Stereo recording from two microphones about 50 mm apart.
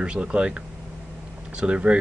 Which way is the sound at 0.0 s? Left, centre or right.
Centre.